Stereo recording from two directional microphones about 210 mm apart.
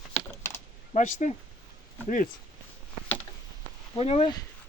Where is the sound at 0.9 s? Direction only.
35° left (ahead or behind).